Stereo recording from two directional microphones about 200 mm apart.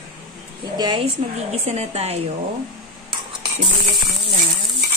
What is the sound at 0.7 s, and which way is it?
A woman's voice, 20° right (ahead or behind).